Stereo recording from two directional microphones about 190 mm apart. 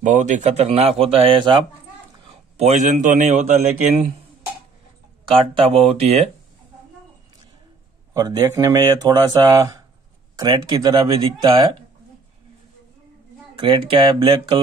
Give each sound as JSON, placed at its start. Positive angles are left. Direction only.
{"t": 0.0, "sound": "speech", "side_deg": -40}
{"t": 2.2, "sound": "a man's voice", "side_deg": -35}
{"t": 5.6, "sound": "speech", "side_deg": -30}
{"t": 8.1, "sound": "speech", "side_deg": -15}
{"t": 13.6, "sound": "speech", "side_deg": -25}